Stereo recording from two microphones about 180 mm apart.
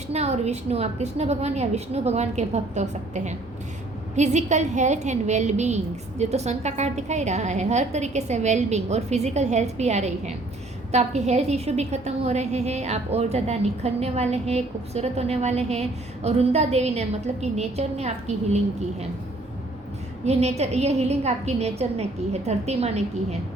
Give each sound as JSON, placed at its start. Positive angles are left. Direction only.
{"t": 0.1, "sound": "a woman's voice", "side_deg": -35}
{"t": 20.2, "sound": "a woman's voice", "side_deg": -35}